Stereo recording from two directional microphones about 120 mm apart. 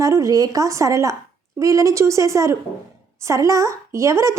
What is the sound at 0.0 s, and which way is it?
A woman's voice, 25° right (ahead or behind).